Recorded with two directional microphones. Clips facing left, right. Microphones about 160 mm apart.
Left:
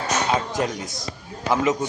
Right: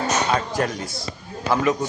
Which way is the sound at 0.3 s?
20° left (ahead or behind).